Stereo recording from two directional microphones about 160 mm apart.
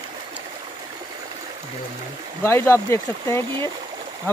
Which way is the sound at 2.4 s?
15° left (ahead or behind).